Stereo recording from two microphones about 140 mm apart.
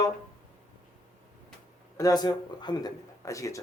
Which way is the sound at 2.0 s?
25° left (ahead or behind).